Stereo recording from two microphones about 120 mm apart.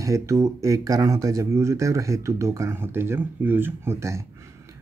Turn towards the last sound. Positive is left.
turn(degrees=-25)  # may be behind; listen again after turning